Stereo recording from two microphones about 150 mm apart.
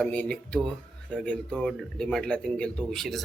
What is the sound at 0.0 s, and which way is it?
A man's voice, 10° left (ahead or behind).